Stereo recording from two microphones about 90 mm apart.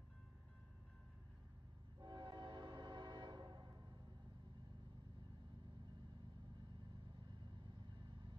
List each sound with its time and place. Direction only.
2.0 s train horn: 55° right (ahead or behind)